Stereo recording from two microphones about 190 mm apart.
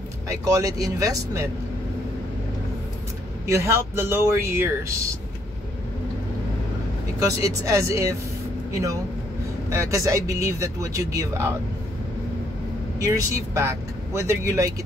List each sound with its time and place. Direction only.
0.3 s speech: 20° right (ahead or behind)
3.4 s speech: 15° right (ahead or behind)
7.2 s speech: 15° right (ahead or behind)
9.7 s speech: 15° right (ahead or behind)
13.0 s speech: 15° right (ahead or behind)